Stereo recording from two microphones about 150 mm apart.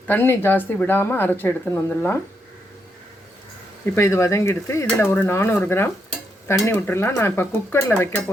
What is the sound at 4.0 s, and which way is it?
Dishes, 20° left (ahead or behind).